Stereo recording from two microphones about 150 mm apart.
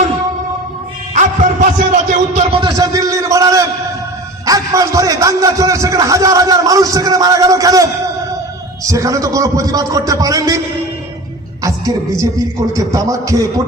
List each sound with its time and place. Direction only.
1.1 s music: 60° right (ahead or behind)
2.7 s a sound: 20° right (ahead or behind)
4.4 s a man's voice: 20° right (ahead or behind)
11.6 s a man's voice: 20° right (ahead or behind)